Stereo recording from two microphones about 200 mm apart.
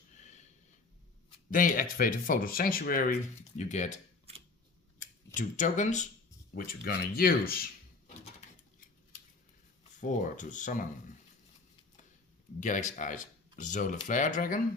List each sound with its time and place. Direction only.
1.5 s speech: 45° left (ahead or behind)
5.3 s speech: 40° left (ahead or behind)
6.5 s speech: 50° left (ahead or behind)
10.0 s speech: 40° left (ahead or behind)
12.5 s speech: 40° left (ahead or behind)